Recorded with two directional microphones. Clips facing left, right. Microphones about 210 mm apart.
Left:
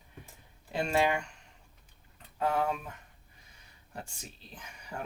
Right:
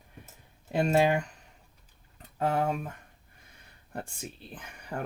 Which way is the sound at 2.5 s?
40° right (ahead or behind).